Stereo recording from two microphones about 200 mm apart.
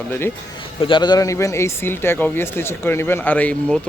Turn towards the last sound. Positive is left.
turn(degrees=5)  # may be behind; listen again after turning